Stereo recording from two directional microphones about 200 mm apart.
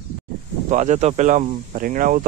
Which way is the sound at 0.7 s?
35° right (ahead or behind).